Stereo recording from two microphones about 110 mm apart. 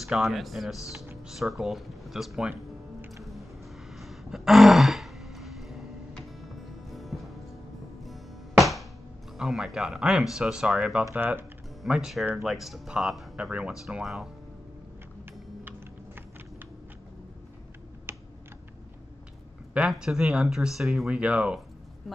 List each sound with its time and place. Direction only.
0.0 s speech: centre (ahead or behind)
2.5 s music: 20° right (ahead or behind)
3.9 s a sound: centre (ahead or behind)
6.9 s music: centre (ahead or behind)
9.4 s speech: 5° right (ahead or behind)
11.1 s speech: 15° right (ahead or behind)
11.8 s speech: 5° right (ahead or behind)
18.1 s typing: 20° right (ahead or behind)
19.9 s speech: 5° right (ahead or behind)